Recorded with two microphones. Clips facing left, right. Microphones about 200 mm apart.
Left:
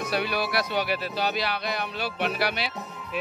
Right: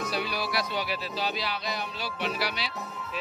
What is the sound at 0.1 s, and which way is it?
Speech, 60° left (ahead or behind).